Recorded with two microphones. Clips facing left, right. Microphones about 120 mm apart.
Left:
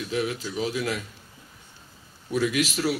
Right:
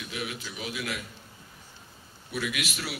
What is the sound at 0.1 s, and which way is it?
Speech, 35° left (ahead or behind).